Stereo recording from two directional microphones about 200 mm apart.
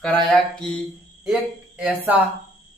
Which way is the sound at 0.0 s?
5° left (ahead or behind).